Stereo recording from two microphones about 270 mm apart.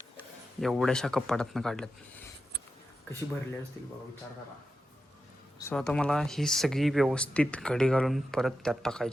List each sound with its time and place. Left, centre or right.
0.6 s speech: centre
3.8 s speech: centre
5.5 s speech: centre